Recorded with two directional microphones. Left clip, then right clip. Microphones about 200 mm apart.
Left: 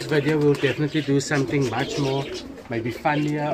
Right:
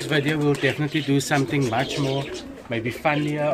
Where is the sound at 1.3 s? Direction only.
50° right (ahead or behind).